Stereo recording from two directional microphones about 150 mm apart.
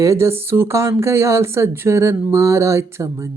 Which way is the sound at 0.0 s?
20° right (ahead or behind).